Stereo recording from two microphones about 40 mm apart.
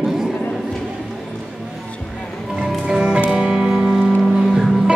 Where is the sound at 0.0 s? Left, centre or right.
Centre.